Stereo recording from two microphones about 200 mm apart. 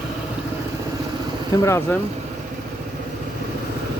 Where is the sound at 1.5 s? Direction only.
15° left (ahead or behind).